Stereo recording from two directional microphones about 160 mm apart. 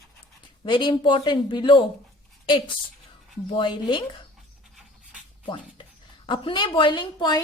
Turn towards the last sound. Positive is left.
turn(degrees=30)  # may be behind; listen again after turning